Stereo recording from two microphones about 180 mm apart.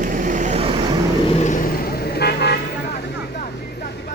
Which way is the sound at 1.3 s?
45° left (ahead or behind).